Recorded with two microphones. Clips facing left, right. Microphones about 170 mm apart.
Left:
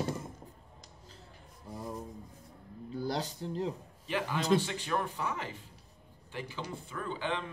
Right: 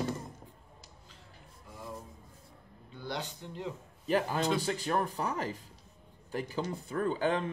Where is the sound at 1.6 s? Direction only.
35° left (ahead or behind).